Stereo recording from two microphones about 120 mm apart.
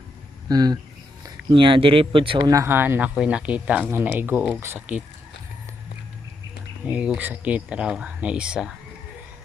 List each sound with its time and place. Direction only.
0.4 s speech: 35° right (ahead or behind)
1.2 s speech: 45° right (ahead or behind)
2.4 s speech: 25° right (ahead or behind)
6.8 s speech: 10° right (ahead or behind)